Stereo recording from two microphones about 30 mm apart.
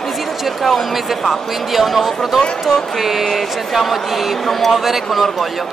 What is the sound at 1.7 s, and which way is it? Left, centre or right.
A man's voice, centre.